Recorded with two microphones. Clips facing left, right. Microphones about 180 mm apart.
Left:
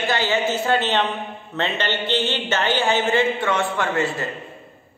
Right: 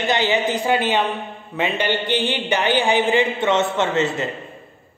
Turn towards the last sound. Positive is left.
turn(degrees=-20)  # may be behind; listen again after turning